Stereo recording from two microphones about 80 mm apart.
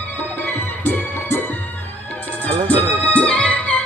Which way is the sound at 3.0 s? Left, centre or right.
Centre.